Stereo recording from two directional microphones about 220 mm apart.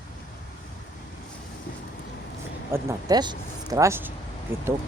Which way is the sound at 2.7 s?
20° right (ahead or behind).